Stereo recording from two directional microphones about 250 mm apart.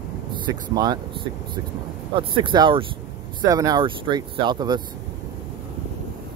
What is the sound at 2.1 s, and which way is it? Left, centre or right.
Speech, centre.